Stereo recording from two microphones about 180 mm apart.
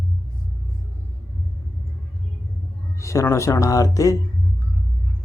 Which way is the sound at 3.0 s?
15° left (ahead or behind).